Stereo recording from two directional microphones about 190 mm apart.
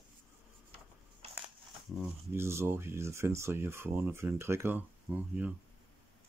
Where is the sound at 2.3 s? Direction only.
15° right (ahead or behind).